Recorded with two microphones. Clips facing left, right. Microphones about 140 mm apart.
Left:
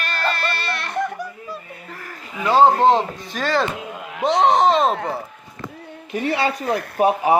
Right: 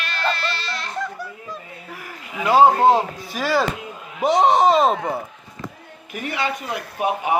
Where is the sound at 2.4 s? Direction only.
10° right (ahead or behind).